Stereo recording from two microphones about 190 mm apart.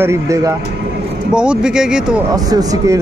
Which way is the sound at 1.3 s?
5° right (ahead or behind).